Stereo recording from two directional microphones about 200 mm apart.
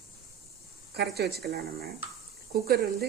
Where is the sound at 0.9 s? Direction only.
55° right (ahead or behind).